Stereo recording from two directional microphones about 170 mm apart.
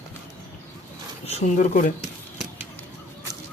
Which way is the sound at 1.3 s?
45° left (ahead or behind).